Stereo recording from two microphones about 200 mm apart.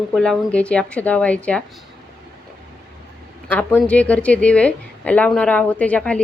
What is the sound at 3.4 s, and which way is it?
A woman's voice, 10° left (ahead or behind).